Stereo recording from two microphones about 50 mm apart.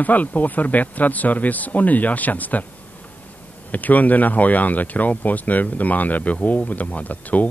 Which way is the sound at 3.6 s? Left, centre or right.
Left.